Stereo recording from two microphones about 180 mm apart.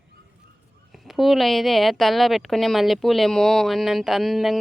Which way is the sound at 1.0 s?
Centre (ahead or behind).